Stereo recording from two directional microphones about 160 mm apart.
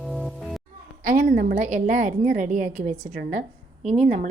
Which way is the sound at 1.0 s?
50° right (ahead or behind).